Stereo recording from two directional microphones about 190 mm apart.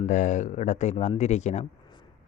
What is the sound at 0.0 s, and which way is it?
Speech, 40° left (ahead or behind).